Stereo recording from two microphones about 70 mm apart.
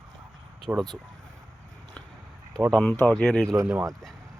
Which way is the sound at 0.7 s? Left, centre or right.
Right.